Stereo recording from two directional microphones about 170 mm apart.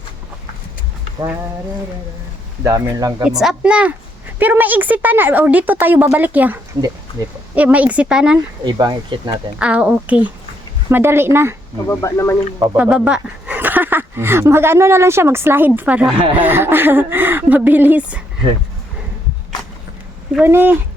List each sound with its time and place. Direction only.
2.6 s speech: 20° right (ahead or behind)
3.2 s speech: 5° right (ahead or behind)
8.6 s speech: 25° right (ahead or behind)
9.6 s speech: 5° right (ahead or behind)
11.9 s speech: 15° left (ahead or behind)
12.7 s speech: 5° right (ahead or behind)
20.3 s speech: 10° right (ahead or behind)